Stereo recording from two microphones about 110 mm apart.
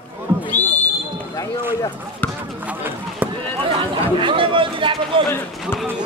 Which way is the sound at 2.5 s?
15° right (ahead or behind).